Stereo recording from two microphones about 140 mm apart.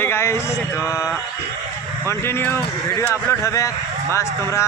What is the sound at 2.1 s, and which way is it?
Speech, 15° left (ahead or behind).